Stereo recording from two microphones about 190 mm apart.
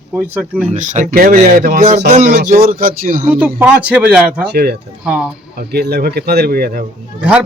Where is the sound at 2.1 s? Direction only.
40° right (ahead or behind).